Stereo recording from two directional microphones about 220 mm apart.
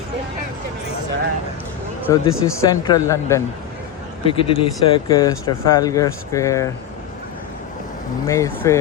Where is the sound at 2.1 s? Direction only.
15° left (ahead or behind).